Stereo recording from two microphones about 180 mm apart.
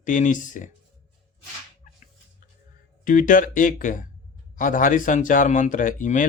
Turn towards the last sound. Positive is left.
turn(degrees=45)  # may be behind; listen again after turning